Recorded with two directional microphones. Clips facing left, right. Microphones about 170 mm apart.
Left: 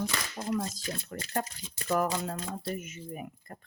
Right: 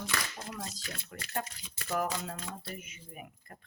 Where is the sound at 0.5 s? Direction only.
40° left (ahead or behind).